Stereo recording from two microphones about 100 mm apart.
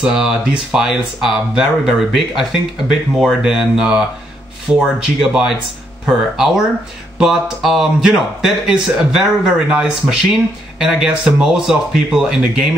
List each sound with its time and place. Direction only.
0.0 s speech: 10° right (ahead or behind)